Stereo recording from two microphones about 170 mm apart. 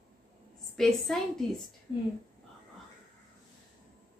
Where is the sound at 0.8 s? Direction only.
Centre (ahead or behind).